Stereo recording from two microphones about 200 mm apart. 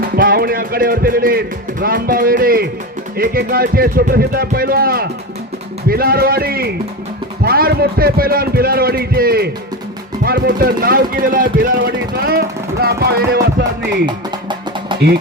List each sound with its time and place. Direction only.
0.2 s speech: 50° right (ahead or behind)
15.0 s speech: 60° right (ahead or behind)